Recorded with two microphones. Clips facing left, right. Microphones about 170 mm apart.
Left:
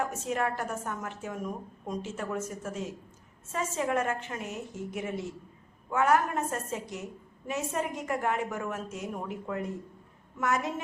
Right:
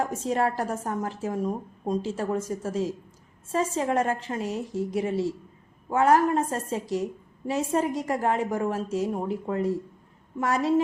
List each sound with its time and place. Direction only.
0.2 s a woman's voice: 35° right (ahead or behind)